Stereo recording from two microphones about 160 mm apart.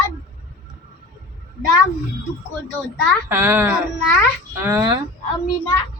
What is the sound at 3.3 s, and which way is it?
Speech, 15° right (ahead or behind).